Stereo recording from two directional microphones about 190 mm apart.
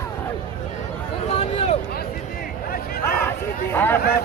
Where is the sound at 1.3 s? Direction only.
35° left (ahead or behind).